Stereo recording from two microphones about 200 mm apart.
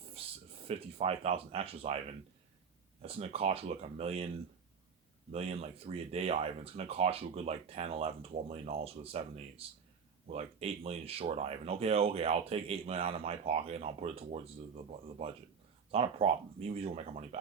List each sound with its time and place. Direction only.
0.7 s speech: 30° right (ahead or behind)
3.0 s speech: 30° right (ahead or behind)
5.3 s speech: 30° right (ahead or behind)
15.9 s speech: 30° right (ahead or behind)